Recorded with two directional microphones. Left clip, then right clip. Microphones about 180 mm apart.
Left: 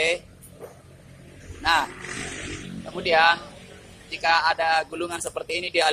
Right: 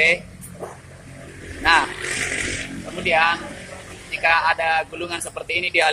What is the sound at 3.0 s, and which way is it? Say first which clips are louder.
Speech: right 1 dB; 20° left (ahead or behind).